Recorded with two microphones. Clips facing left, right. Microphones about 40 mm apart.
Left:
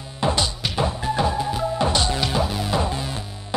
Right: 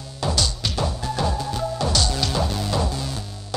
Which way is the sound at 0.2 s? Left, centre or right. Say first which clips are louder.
Left 2 dB; left.